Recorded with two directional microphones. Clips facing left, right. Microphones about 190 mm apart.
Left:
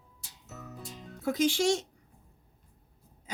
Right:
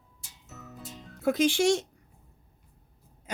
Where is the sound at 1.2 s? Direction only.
60° right (ahead or behind).